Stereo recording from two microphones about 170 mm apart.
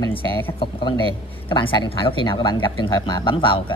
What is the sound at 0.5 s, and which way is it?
Speech, 30° left (ahead or behind).